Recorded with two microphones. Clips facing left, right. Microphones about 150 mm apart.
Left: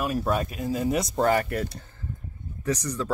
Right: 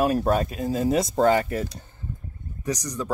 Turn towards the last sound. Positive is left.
turn(degrees=-15)  # may be behind; listen again after turning